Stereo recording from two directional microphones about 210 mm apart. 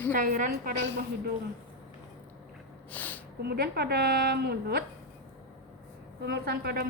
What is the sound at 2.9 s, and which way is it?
Speech, 10° left (ahead or behind).